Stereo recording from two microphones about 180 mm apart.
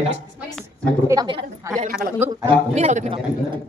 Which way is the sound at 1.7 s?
55° right (ahead or behind).